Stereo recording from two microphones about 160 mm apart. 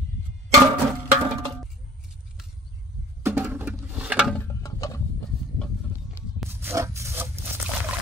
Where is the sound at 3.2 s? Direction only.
15° right (ahead or behind).